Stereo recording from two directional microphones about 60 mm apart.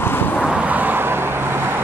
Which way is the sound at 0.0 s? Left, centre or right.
Left.